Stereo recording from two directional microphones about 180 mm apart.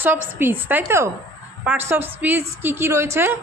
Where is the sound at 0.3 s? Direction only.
10° right (ahead or behind).